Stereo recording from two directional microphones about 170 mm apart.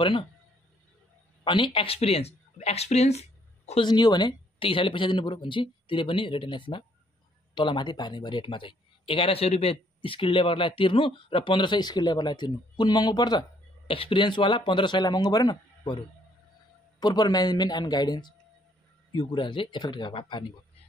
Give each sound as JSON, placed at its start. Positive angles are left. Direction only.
{"t": 0.0, "sound": "speech", "side_deg": 30}
{"t": 1.4, "sound": "speech", "side_deg": 30}
{"t": 3.8, "sound": "speech", "side_deg": 25}